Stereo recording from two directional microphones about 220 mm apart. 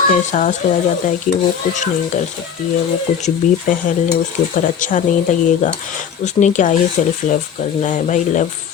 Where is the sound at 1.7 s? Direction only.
35° left (ahead or behind).